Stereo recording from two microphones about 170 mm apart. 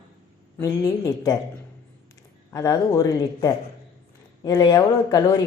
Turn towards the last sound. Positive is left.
turn(degrees=25)  # may be behind; listen again after turning